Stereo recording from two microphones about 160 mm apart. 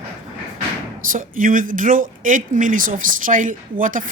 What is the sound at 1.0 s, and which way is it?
Speech, 60° right (ahead or behind).